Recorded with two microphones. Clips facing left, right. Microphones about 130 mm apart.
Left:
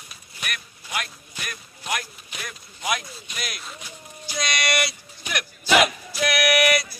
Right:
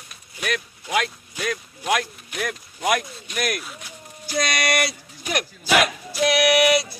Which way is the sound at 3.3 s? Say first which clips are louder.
Right 10 dB; 60° right (ahead or behind).